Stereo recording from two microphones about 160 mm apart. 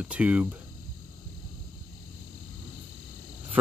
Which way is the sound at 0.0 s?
10° right (ahead or behind).